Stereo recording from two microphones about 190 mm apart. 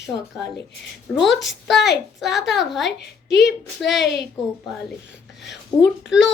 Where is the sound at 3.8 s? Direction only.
Centre (ahead or behind).